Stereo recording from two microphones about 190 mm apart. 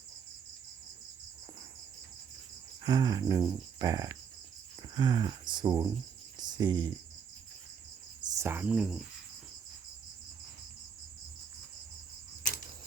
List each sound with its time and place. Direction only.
2.8 s cricket: 20° right (ahead or behind)
8.3 s speech: 15° right (ahead or behind)